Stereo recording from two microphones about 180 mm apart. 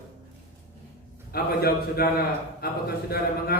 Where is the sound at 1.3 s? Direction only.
60° left (ahead or behind).